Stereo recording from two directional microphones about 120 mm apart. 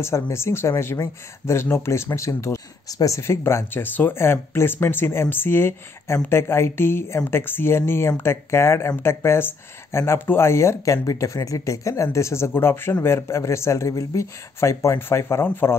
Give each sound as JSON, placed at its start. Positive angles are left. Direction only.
{"t": 0.0, "sound": "speech", "side_deg": 20}